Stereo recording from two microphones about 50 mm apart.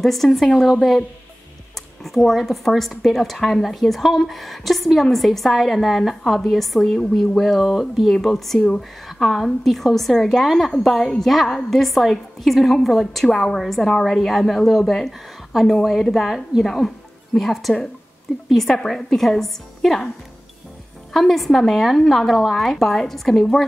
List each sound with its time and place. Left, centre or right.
0.0 s a woman's voice: centre
2.0 s a woman's voice: centre
8.5 s speech: centre
9.0 s a woman's voice: centre
21.1 s a woman's voice: centre